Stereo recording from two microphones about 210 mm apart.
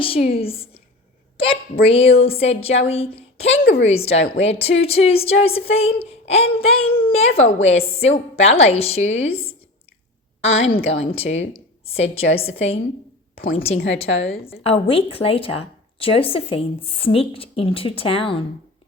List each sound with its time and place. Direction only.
0.0 s a woman's voice: 25° left (ahead or behind)
13.7 s a woman's voice: 55° left (ahead or behind)
14.6 s speech: 25° left (ahead or behind)